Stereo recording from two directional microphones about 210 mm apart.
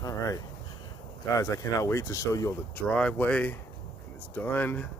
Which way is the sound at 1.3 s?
15° left (ahead or behind).